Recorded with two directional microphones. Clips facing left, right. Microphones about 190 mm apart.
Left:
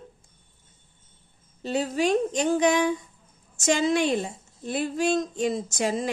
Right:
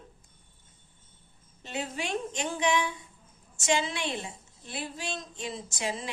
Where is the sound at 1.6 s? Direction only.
35° left (ahead or behind).